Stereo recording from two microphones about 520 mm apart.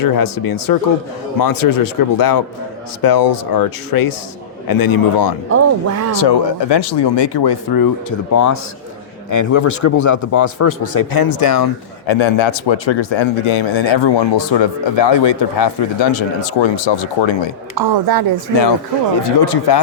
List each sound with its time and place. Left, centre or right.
0.0 s a man's voice: left
5.5 s speech: right
6.1 s speech: left
8.3 s a man's voice: left
12.0 s a man's voice: left
17.7 s a woman's voice: right
19.4 s speech: left